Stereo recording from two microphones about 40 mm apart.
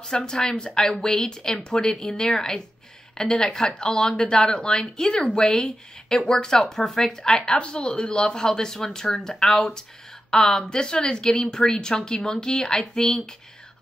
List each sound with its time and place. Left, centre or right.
0.1 s a woman's voice: centre
7.3 s a woman's voice: left; by 13.3 s centre